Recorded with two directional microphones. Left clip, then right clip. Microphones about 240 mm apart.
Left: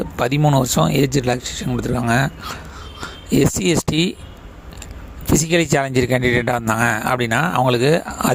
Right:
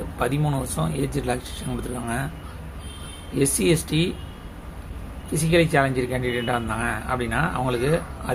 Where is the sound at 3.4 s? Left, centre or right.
Left.